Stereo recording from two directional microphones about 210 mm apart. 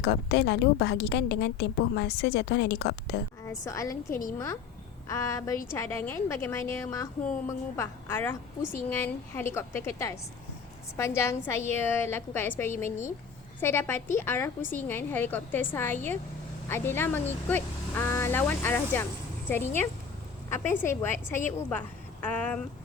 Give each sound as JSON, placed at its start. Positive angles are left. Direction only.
{"t": 0.0, "sound": "a woman's voice", "side_deg": 55}
{"t": 3.5, "sound": "a woman's voice", "side_deg": 15}